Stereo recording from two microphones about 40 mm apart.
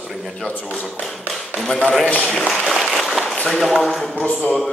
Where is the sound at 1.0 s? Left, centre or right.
Centre.